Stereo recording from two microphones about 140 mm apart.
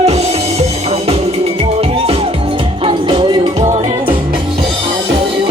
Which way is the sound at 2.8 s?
35° right (ahead or behind).